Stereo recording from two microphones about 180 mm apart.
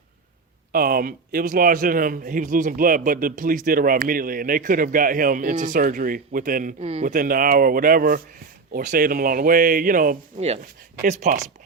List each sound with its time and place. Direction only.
0.7 s a man's voice: 55° right (ahead or behind)
10.3 s speech: 35° right (ahead or behind)
11.0 s a man's voice: 45° right (ahead or behind)